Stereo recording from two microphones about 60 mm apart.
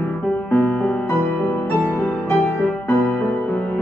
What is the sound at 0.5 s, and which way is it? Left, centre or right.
Music, centre.